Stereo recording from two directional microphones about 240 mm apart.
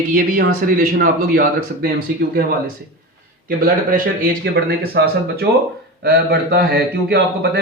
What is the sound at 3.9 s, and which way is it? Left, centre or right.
Speech, right.